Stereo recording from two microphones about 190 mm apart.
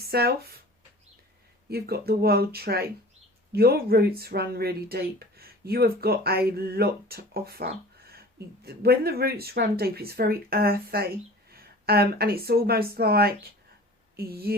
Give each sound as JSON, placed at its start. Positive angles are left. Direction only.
{"t": 0.0, "sound": "speech", "side_deg": -55}
{"t": 1.7, "sound": "speech", "side_deg": -55}